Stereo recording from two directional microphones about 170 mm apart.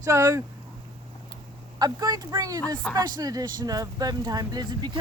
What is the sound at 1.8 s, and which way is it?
Speech, 25° right (ahead or behind).